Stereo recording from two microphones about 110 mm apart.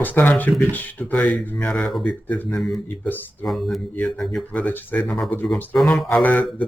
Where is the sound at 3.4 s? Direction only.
Centre (ahead or behind).